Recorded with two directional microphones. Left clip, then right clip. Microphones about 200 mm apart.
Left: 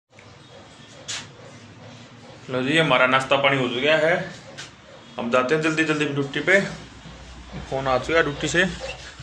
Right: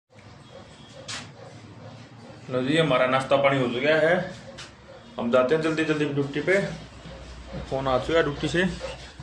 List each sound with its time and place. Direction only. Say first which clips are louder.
2.5 s a man's voice: left 3 dB; centre (ahead or behind)
5.1 s a man's voice: left 1 dB; centre (ahead or behind)
7.7 s a man's voice: left 2 dB; 5° right (ahead or behind)